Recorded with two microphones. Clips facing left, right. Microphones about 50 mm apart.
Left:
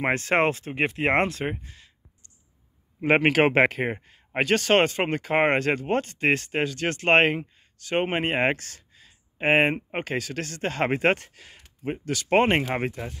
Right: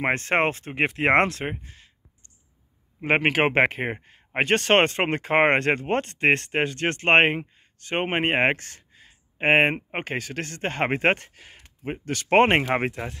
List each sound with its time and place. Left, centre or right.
0.0 s speech: right
0.7 s speech: right
1.4 s speech: right
3.1 s speech: centre
4.6 s speech: right; by 11.6 s centre
11.8 s speech: right